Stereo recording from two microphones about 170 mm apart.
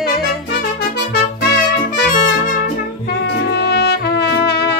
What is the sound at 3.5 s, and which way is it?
Trumpet, 75° left (ahead or behind).